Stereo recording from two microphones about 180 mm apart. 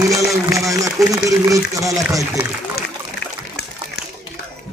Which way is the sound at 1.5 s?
20° right (ahead or behind).